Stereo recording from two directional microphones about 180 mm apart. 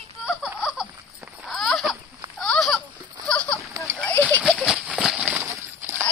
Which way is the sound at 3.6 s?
15° right (ahead or behind).